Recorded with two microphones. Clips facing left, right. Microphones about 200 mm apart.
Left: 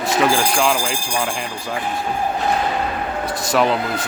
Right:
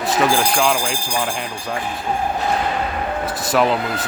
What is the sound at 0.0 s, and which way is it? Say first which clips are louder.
Speech: even; centre (ahead or behind).